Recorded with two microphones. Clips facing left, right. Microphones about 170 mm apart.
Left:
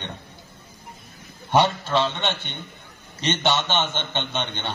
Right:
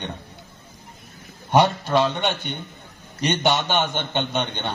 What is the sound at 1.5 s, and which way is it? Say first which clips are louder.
A man's voice: right 2 dB; 15° right (ahead or behind).